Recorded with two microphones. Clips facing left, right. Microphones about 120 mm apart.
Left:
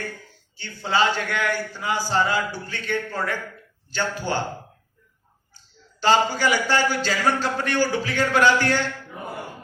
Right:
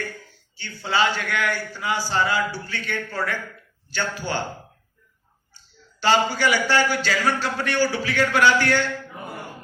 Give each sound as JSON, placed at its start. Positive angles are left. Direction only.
{"t": 0.9, "sound": "a man's voice", "side_deg": 30}
{"t": 6.1, "sound": "a man's voice", "side_deg": 35}